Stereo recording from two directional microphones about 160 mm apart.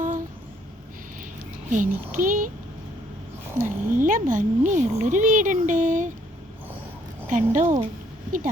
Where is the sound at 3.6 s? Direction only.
55° right (ahead or behind).